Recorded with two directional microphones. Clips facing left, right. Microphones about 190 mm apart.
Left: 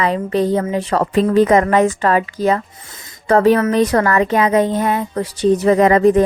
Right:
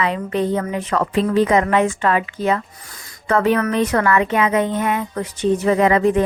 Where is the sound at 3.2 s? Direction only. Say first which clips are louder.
Left 5 dB; 35° left (ahead or behind).